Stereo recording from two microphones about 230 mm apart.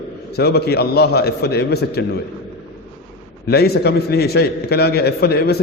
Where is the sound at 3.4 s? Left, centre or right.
Left.